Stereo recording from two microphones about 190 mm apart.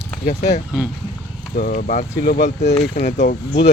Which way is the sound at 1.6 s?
45° left (ahead or behind).